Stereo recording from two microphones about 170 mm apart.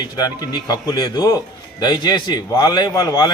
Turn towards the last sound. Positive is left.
turn(degrees=20)  # may be behind; listen again after turning